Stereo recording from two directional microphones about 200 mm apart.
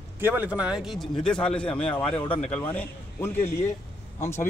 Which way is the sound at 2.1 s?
25° left (ahead or behind).